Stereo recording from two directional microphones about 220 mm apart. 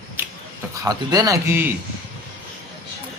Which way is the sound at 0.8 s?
15° right (ahead or behind).